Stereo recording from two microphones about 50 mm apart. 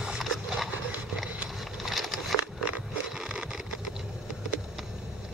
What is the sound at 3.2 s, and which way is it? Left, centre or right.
Vehicle, centre.